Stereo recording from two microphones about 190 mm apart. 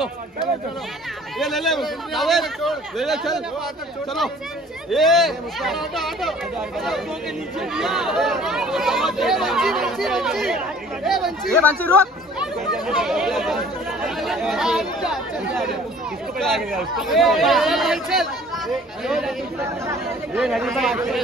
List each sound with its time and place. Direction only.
1.4 s speech: centre (ahead or behind)
4.8 s speech: centre (ahead or behind)
7.7 s speech: centre (ahead or behind)
20.3 s speech: centre (ahead or behind)